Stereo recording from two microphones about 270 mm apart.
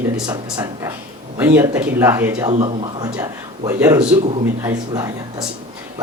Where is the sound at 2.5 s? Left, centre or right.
Right.